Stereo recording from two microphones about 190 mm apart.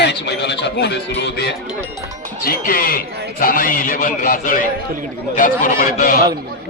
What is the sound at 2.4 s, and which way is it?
A man's voice, 50° left (ahead or behind).